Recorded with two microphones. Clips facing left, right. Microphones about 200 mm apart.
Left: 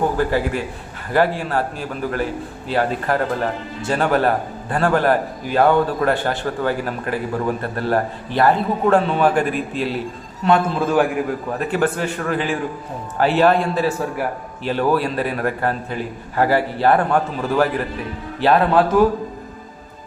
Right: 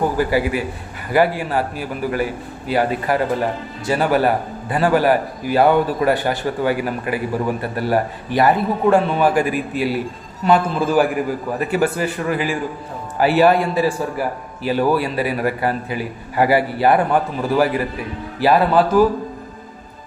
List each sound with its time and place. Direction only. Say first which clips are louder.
0.2 s a man's voice: right 1 dB; 5° right (ahead or behind)